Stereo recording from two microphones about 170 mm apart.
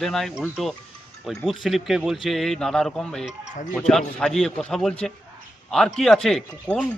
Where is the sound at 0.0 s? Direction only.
Centre (ahead or behind).